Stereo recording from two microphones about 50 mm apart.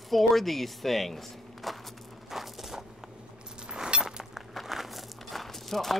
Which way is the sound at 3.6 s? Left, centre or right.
Centre.